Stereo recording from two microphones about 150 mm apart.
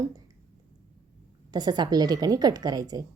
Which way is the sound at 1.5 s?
30° right (ahead or behind).